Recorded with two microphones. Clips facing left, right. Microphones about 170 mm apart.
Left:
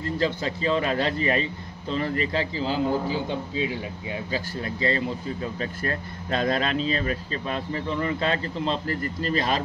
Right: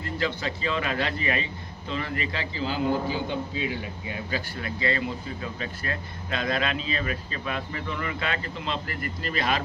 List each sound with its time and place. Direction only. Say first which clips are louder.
0.2 s speech: left 3 dB; 35° left (ahead or behind)